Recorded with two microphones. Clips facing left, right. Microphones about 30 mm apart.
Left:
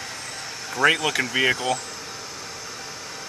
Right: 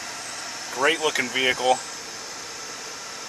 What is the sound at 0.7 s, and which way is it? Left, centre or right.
Speech, centre.